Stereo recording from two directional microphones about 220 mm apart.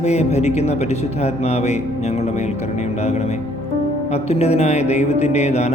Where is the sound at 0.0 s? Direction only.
30° left (ahead or behind).